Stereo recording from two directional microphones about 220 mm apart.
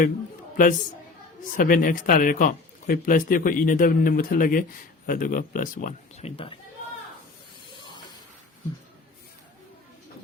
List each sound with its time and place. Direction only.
0.5 s a woman's voice: 35° left (ahead or behind)